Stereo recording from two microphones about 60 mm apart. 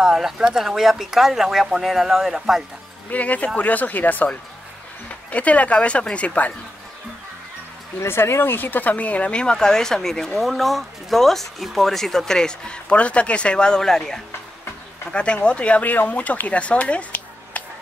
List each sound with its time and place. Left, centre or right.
0.0 s speech: centre
3.1 s speech: left
5.3 s speech: left
8.0 s speech: left